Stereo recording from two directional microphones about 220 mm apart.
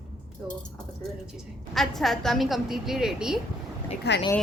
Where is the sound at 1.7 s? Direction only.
Centre (ahead or behind).